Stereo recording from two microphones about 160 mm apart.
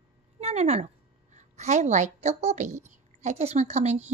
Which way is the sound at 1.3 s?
45° right (ahead or behind).